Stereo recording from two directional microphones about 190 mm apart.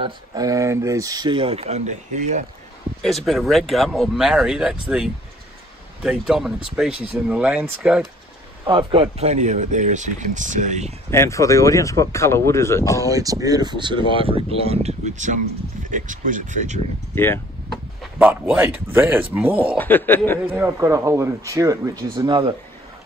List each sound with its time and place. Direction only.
0.0 s speech: 20° right (ahead or behind); by 2.4 s 40° right (ahead or behind)
3.3 s speech: centre (ahead or behind)
8.6 s speech: 25° right (ahead or behind)
11.1 s speech: 15° left (ahead or behind)
13.1 s speech: 20° right (ahead or behind); by 16.8 s 40° right (ahead or behind)
17.1 s speech: 10° left (ahead or behind)
18.2 s speech: 10° right (ahead or behind)
19.8 s speech: 10° left (ahead or behind)
20.5 s speech: 15° right (ahead or behind)